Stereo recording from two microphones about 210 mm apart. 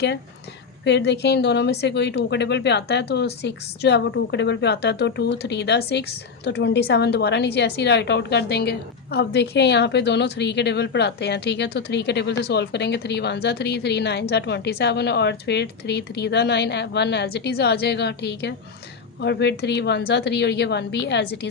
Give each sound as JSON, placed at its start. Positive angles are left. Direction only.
{"t": 0.9, "sound": "a woman's voice", "side_deg": 55}